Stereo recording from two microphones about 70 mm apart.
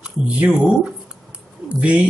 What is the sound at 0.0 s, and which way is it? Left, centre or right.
Speech, centre.